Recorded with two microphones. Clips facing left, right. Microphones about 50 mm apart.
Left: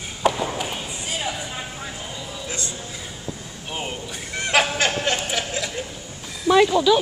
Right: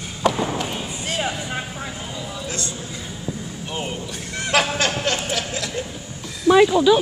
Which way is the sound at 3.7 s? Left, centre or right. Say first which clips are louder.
Right 1 dB; centre.